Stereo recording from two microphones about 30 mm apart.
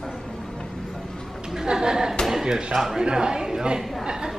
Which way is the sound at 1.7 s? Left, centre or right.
Right.